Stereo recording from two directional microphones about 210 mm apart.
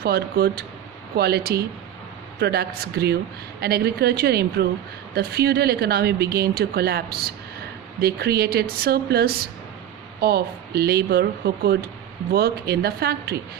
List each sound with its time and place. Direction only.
0.0 s speech: 50° right (ahead or behind)
8.0 s speech: 50° right (ahead or behind)